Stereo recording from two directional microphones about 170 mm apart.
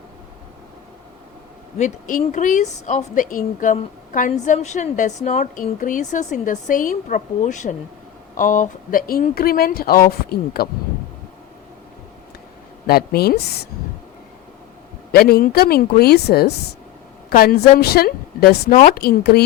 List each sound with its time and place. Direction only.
1.8 s a woman's voice: 50° left (ahead or behind)
12.9 s speech: 65° left (ahead or behind)
15.1 s a woman's voice: 65° left (ahead or behind)